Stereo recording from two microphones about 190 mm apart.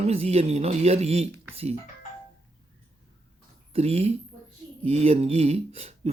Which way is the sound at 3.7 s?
30° right (ahead or behind).